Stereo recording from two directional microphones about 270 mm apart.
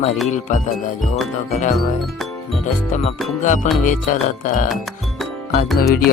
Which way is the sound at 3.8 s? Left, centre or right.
Left.